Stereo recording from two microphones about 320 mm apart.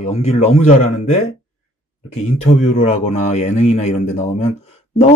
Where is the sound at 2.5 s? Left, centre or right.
Centre.